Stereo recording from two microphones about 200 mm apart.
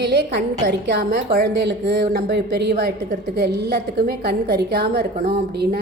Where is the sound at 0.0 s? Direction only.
55° right (ahead or behind).